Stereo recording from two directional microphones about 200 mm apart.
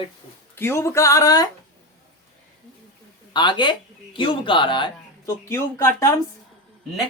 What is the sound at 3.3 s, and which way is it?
Speech, 20° left (ahead or behind).